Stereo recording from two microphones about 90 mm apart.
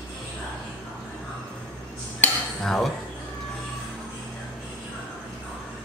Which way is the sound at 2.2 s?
15° left (ahead or behind).